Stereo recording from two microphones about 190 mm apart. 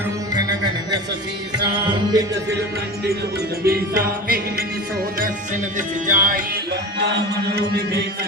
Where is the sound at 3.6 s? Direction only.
50° right (ahead or behind).